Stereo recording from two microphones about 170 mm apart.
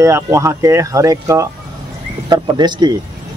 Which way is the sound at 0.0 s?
15° right (ahead or behind).